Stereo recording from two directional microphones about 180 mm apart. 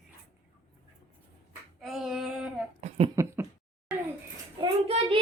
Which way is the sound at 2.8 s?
35° right (ahead or behind).